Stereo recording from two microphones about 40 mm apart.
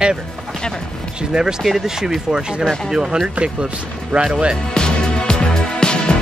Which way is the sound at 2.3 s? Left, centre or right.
Centre.